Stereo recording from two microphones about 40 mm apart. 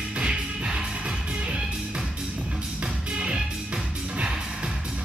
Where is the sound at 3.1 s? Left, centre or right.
Right.